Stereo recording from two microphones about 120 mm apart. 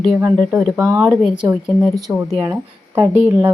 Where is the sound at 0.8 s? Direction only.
20° right (ahead or behind).